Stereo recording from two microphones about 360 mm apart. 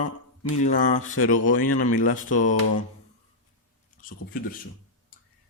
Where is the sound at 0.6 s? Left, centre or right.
Left.